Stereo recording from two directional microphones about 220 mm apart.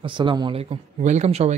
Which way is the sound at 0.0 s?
20° right (ahead or behind).